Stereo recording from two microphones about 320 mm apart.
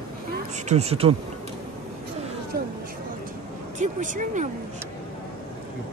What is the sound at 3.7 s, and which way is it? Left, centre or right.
Speech, right.